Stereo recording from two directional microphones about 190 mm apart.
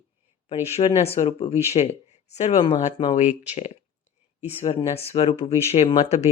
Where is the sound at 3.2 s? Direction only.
40° left (ahead or behind).